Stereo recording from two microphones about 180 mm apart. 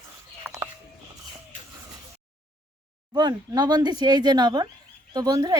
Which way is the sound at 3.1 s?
20° right (ahead or behind).